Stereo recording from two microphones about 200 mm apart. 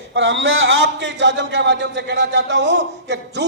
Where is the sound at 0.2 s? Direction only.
70° right (ahead or behind).